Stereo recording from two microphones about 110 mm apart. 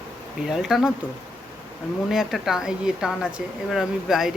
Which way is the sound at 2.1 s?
5° right (ahead or behind).